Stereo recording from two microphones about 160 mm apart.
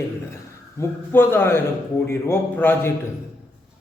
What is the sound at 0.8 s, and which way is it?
Speech, 15° left (ahead or behind).